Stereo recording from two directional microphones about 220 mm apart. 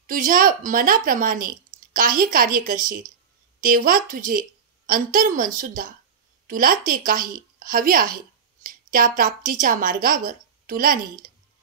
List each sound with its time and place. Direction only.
0.0 s a woman's voice: 40° right (ahead or behind)